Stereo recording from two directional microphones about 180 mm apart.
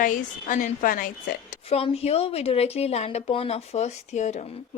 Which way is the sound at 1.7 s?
35° left (ahead or behind).